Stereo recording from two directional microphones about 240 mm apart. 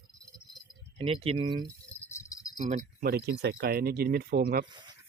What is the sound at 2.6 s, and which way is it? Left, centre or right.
Speech, right.